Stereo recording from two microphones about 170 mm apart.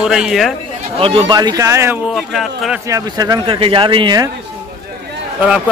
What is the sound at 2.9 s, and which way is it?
Speech, 20° right (ahead or behind).